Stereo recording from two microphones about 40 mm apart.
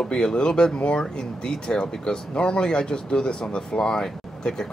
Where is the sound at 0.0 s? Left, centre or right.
Centre.